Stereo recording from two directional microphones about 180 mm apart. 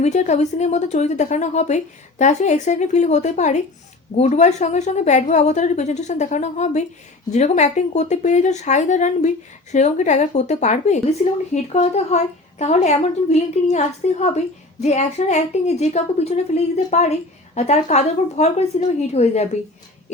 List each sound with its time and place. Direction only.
0.0 s a woman's voice: 40° left (ahead or behind)